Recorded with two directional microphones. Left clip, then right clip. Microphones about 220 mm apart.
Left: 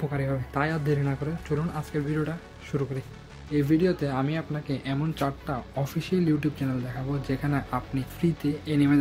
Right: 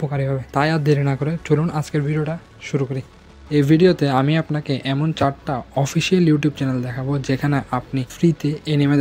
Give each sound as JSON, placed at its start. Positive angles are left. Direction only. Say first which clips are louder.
{"t": 0.1, "sound": "speech", "louder": "right 7 dB", "side_deg": -30}